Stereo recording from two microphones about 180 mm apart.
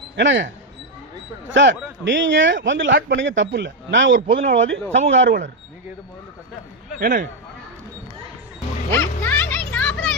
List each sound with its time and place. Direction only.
0.2 s a man's voice: 85° right
7.0 s a man's voice: 45° right (ahead or behind)
8.9 s a sound: 10° left (ahead or behind)